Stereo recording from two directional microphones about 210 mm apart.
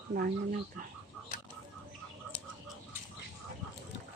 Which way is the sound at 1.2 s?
Centre (ahead or behind).